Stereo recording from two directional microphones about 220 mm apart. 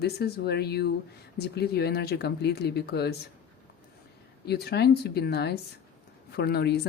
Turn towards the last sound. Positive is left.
turn(degrees=50)  # may be behind; listen again after turning